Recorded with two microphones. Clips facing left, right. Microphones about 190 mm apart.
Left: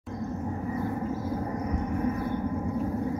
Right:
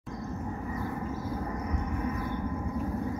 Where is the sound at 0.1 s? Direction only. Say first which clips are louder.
Left 4 dB; 30° left (ahead or behind).